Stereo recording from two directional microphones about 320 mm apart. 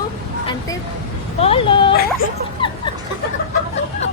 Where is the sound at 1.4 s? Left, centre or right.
Centre.